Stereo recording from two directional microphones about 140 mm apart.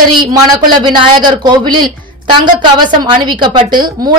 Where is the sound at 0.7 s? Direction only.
30° right (ahead or behind).